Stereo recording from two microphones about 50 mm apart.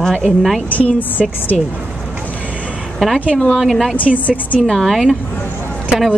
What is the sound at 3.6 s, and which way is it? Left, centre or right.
Speech, centre.